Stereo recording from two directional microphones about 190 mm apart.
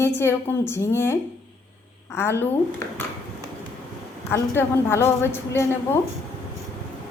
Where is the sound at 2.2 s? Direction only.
10° left (ahead or behind).